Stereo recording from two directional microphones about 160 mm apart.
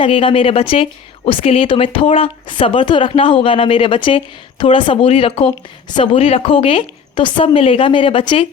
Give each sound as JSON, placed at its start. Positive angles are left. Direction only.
{"t": 0.0, "sound": "a woman's voice", "side_deg": 35}